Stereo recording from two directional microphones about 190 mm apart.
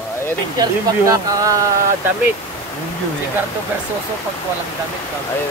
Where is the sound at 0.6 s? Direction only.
20° right (ahead or behind).